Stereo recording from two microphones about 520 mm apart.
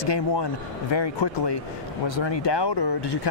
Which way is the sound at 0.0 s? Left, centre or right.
Left.